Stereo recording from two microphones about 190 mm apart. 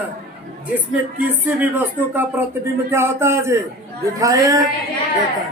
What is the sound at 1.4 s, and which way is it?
Speech, 10° right (ahead or behind).